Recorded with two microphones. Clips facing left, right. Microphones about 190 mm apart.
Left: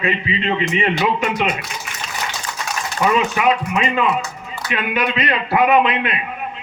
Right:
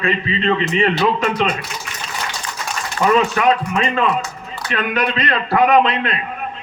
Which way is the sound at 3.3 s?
10° left (ahead or behind).